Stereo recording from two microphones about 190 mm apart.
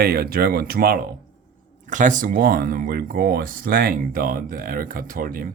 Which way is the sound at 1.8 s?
40° right (ahead or behind).